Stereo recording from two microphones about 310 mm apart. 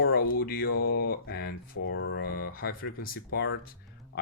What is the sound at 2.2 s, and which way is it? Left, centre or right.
Speech, left.